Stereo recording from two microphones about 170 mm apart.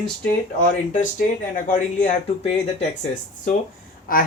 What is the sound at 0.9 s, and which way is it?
Speech, 50° left (ahead or behind).